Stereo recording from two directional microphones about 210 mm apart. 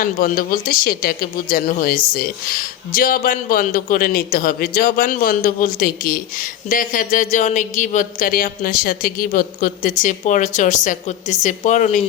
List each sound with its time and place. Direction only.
0.0 s speech: 40° left (ahead or behind)